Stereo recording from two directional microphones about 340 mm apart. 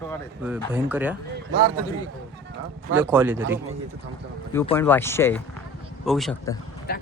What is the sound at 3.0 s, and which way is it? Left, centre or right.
Speech, centre.